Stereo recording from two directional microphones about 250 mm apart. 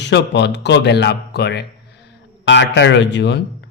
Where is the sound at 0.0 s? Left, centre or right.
Left.